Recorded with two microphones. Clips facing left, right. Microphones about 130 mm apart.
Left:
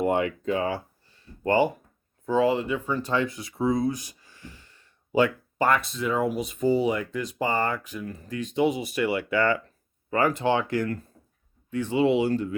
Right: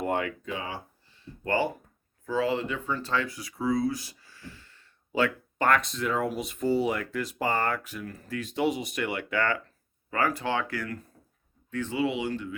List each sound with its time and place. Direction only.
0.0 s a sound: 20° left (ahead or behind)
0.4 s speech: 45° left (ahead or behind)
1.5 s speech: 15° left (ahead or behind)
10.1 s speech: 20° left (ahead or behind)
11.9 s speech: 30° left (ahead or behind)